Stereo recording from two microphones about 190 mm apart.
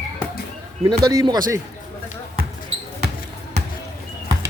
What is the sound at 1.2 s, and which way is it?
Speech, 20° right (ahead or behind).